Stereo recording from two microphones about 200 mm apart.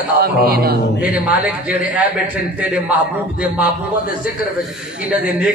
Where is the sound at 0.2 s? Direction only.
50° right (ahead or behind).